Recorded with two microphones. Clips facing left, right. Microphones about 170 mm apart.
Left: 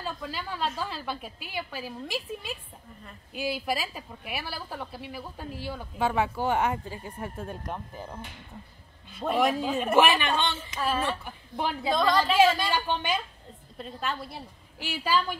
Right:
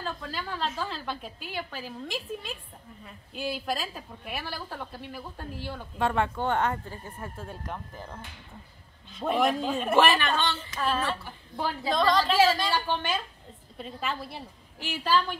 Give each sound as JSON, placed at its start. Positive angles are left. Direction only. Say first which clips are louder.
{"t": 0.0, "sound": "a woman's voice", "louder": "even", "side_deg": 10}
{"t": 9.1, "sound": "a woman's voice", "louder": "even", "side_deg": 0}
{"t": 11.9, "sound": "a woman's voice", "louder": "even", "side_deg": 0}
{"t": 12.5, "sound": "a woman's voice", "louder": "even", "side_deg": 15}
{"t": 13.7, "sound": "a woman's voice", "louder": "even", "side_deg": 0}
{"t": 14.8, "sound": "a woman's voice", "louder": "right 1 dB", "side_deg": 10}